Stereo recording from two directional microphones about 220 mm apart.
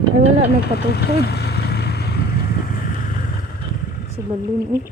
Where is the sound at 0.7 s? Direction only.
45° left (ahead or behind).